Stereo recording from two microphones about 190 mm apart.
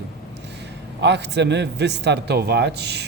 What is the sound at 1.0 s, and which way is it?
A man's voice, 65° right (ahead or behind).